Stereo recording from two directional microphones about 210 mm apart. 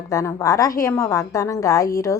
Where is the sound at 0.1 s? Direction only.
15° left (ahead or behind).